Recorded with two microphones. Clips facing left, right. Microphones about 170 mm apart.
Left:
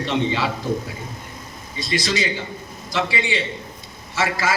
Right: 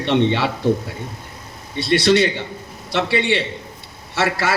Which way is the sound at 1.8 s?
65° right (ahead or behind).